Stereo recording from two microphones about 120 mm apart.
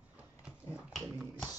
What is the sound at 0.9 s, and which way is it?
Dog, centre (ahead or behind).